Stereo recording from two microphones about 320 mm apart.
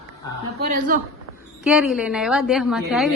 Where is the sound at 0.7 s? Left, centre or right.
Right.